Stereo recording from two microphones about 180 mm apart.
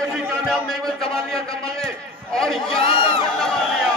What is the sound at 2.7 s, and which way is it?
Speech, 30° left (ahead or behind).